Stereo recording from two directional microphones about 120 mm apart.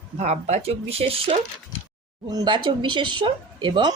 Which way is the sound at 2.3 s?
40° right (ahead or behind).